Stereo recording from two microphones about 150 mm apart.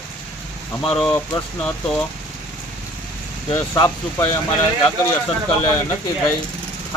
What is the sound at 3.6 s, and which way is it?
Speech, 20° left (ahead or behind).